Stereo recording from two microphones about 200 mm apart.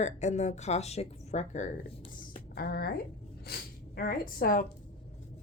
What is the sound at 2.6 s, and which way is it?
Speech, 50° left (ahead or behind).